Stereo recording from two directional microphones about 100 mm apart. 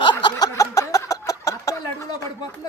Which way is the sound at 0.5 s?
35° left (ahead or behind).